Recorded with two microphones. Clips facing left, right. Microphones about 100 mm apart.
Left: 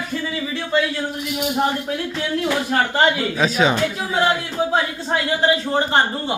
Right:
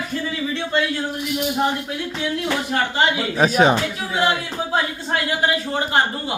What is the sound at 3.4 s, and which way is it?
Speech, 45° right (ahead or behind).